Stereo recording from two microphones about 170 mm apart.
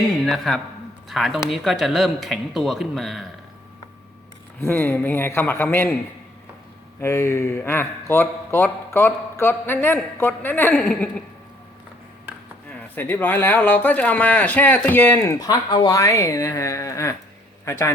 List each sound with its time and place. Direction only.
0.3 s speech: centre (ahead or behind)
4.6 s speech: 10° left (ahead or behind)
7.0 s speech: 15° left (ahead or behind)
13.0 s speech: 10° left (ahead or behind)